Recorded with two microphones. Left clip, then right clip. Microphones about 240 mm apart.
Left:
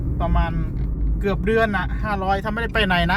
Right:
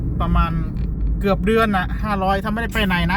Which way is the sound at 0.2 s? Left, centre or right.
Centre.